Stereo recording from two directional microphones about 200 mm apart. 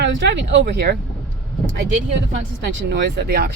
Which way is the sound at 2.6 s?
60° right (ahead or behind).